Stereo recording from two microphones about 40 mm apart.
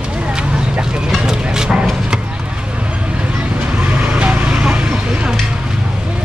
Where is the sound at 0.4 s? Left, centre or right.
Right.